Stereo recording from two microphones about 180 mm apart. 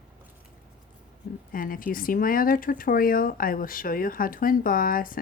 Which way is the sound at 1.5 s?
50° left (ahead or behind).